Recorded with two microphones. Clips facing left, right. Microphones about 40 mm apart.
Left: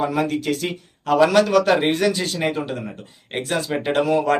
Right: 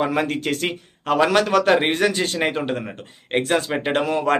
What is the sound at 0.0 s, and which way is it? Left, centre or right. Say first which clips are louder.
A man's voice: even; right.